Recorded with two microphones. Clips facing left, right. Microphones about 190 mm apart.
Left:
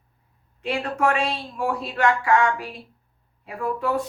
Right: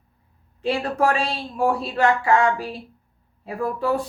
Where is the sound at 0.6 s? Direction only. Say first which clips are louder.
Right 2 dB; 35° right (ahead or behind).